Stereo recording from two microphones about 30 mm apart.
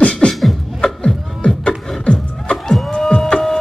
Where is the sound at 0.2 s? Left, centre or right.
Left.